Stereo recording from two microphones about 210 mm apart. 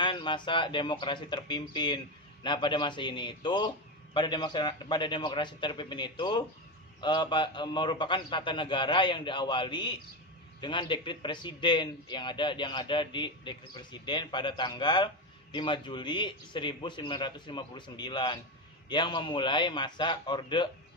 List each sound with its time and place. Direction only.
0.0 s a man's voice: 20° left (ahead or behind)